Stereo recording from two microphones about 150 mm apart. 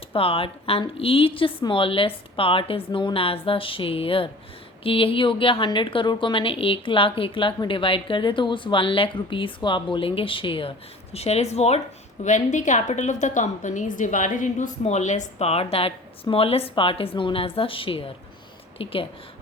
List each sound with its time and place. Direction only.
0.1 s a woman's voice: 40° left (ahead or behind)